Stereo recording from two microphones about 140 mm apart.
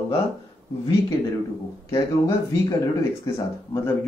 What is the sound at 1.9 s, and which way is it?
Speech, 20° left (ahead or behind).